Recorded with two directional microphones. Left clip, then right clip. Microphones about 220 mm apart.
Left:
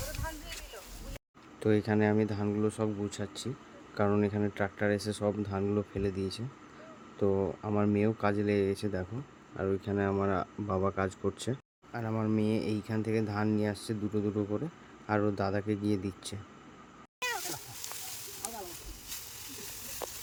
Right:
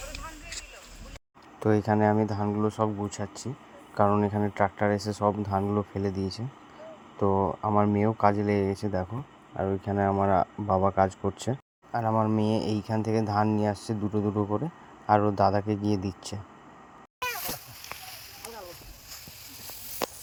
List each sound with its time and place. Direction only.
1.5 s speech: 15° right (ahead or behind)